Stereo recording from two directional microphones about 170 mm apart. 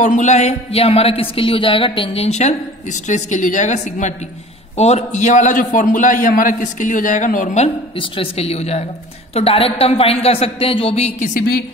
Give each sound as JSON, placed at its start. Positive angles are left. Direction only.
{"t": 0.0, "sound": "a man's voice", "side_deg": 45}